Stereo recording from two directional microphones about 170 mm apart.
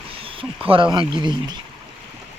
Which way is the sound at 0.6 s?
30° right (ahead or behind).